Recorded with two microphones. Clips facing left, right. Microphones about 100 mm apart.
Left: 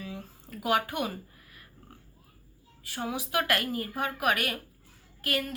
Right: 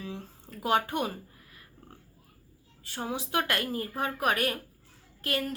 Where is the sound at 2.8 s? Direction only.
30° right (ahead or behind).